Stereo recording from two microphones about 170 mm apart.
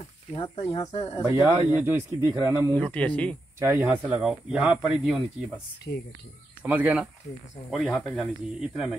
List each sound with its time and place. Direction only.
0.3 s speech: 30° left (ahead or behind)
1.3 s speech: 15° right (ahead or behind)
2.8 s speech: 5° left (ahead or behind)
3.5 s speech: 15° right (ahead or behind)
6.6 s speech: 10° right (ahead or behind)
7.7 s speech: centre (ahead or behind)